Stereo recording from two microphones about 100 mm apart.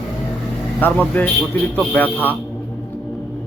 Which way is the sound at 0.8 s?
15° left (ahead or behind).